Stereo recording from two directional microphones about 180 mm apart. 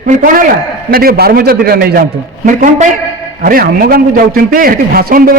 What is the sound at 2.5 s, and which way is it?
A man's voice, 45° right (ahead or behind).